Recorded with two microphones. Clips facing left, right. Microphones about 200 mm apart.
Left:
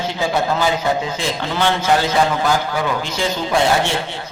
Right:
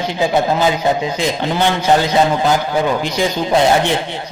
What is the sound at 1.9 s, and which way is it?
Speech, 20° right (ahead or behind).